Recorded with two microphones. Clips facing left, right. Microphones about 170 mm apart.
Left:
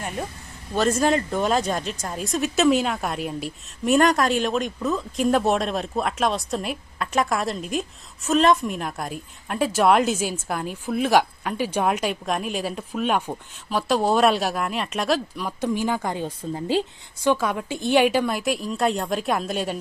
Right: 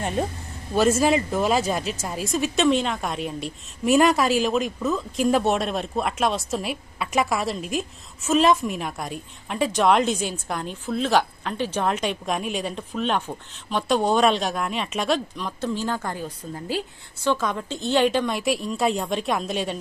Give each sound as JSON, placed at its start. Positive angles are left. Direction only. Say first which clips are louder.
{"t": 0.0, "sound": "a sound", "louder": "right 5 dB", "side_deg": -25}
{"t": 0.7, "sound": "a woman's voice", "louder": "right 1 dB", "side_deg": -10}
{"t": 16.2, "sound": "a woman's voice", "louder": "left 4 dB", "side_deg": 25}
{"t": 17.2, "sound": "a woman's voice", "louder": "left 2 dB", "side_deg": 10}